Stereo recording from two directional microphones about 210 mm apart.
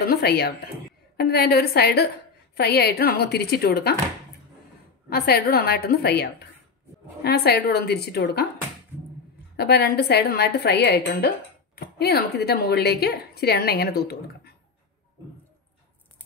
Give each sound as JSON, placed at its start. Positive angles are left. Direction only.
{"t": 0.0, "sound": "a woman's voice", "side_deg": 50}
{"t": 5.1, "sound": "a woman's voice", "side_deg": 50}
{"t": 7.2, "sound": "a woman's voice", "side_deg": 50}
{"t": 9.6, "sound": "a woman's voice", "side_deg": 50}